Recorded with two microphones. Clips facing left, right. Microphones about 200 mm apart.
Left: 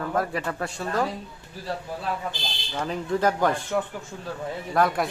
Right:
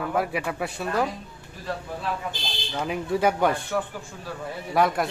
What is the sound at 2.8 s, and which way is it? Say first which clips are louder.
Speech: even; 10° right (ahead or behind).